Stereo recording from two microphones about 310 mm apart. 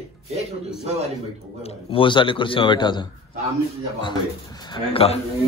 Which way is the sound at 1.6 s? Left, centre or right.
Centre.